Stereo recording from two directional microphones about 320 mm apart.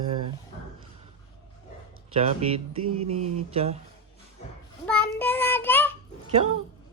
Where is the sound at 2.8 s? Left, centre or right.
Right.